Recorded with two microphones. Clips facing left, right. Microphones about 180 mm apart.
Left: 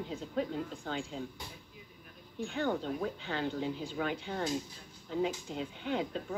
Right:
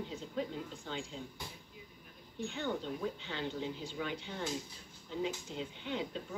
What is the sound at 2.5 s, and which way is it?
Speech, 50° left (ahead or behind).